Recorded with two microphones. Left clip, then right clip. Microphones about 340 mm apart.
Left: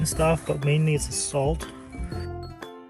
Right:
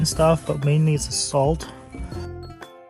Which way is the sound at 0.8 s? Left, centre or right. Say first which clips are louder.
Right 1 dB; right.